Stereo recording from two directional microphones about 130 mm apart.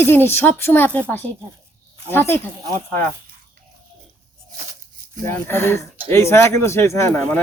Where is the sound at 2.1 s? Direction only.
15° left (ahead or behind).